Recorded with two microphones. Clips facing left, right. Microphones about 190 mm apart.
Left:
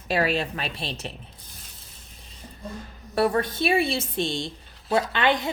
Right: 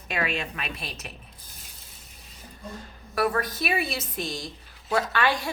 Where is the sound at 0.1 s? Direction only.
35° left (ahead or behind).